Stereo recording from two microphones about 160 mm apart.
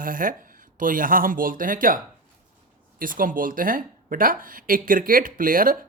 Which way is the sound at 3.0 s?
60° right (ahead or behind).